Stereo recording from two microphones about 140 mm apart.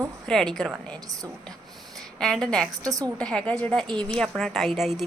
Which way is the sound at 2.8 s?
25° right (ahead or behind).